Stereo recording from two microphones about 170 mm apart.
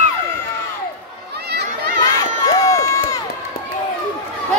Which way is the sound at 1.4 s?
70° right (ahead or behind).